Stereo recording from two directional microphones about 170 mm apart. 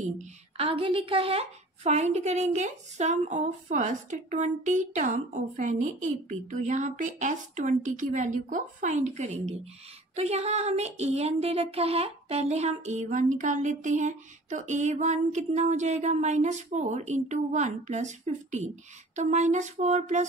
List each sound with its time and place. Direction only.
0.0 s a woman's voice: 45° right (ahead or behind)
0.7 s a woman's voice: 30° right (ahead or behind)